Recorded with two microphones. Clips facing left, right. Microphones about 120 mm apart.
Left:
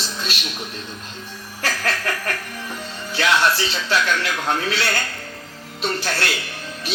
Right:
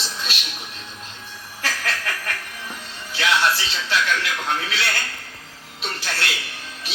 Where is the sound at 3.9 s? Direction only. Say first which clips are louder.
Left 1 dB; 40° left (ahead or behind).